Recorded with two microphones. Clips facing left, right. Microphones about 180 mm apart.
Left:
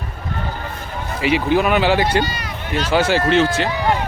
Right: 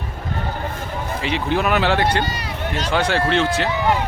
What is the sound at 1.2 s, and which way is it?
Speech, 5° left (ahead or behind).